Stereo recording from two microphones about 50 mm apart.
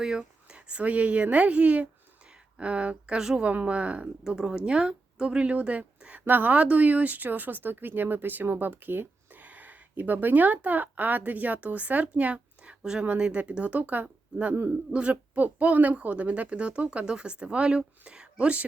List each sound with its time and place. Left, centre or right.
0.0 s a woman's voice: centre
3.2 s speech: centre
3.4 s a woman's voice: right
4.2 s a woman's voice: centre; by 14.1 s right
14.9 s a woman's voice: right